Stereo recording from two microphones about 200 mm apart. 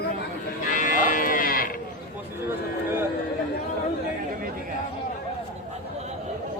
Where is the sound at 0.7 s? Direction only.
40° left (ahead or behind).